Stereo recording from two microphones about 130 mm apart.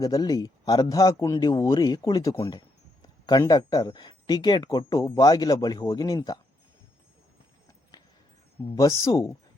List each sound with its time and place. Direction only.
0.0 s speech: 25° left (ahead or behind)
8.7 s speech: 25° left (ahead or behind)